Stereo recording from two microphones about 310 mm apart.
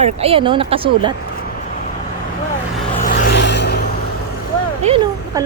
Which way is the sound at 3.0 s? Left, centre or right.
Left.